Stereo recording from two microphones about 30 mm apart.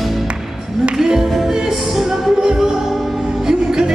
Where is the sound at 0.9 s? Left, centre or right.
Centre.